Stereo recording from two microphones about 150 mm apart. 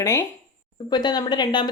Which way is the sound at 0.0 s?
20° left (ahead or behind).